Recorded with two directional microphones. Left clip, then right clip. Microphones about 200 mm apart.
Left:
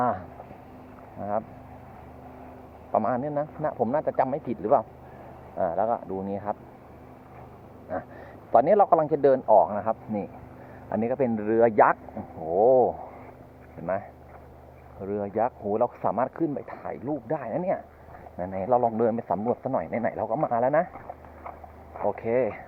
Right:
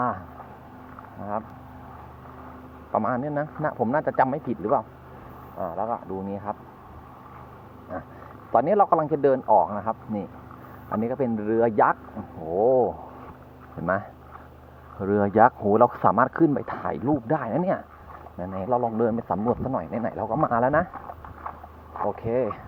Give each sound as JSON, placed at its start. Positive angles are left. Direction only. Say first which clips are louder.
{"t": 1.2, "sound": "vehicle", "louder": "left 2 dB", "side_deg": -5}
{"t": 2.9, "sound": "a man's voice", "louder": "even", "side_deg": -15}
{"t": 5.5, "sound": "speech", "louder": "left 3 dB", "side_deg": 0}
{"t": 7.9, "sound": "a man's voice", "louder": "left 2 dB", "side_deg": -10}
{"t": 13.8, "sound": "speech", "louder": "right 3 dB", "side_deg": -35}
{"t": 18.3, "sound": "a man's voice", "louder": "left 1 dB", "side_deg": -20}
{"t": 22.0, "sound": "a man's voice", "louder": "even", "side_deg": -15}